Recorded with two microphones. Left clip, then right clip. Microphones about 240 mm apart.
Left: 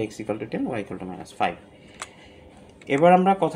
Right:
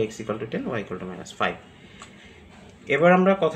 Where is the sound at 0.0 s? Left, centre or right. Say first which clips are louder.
Right 1 dB; left.